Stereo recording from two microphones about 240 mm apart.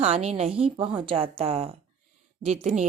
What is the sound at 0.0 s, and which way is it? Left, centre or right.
A woman's voice, right.